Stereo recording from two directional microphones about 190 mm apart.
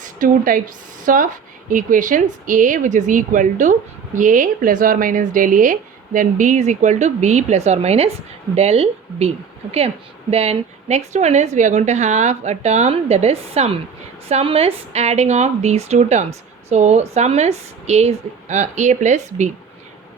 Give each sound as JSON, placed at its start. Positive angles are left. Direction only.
{"t": 0.0, "sound": "a woman's voice", "side_deg": -45}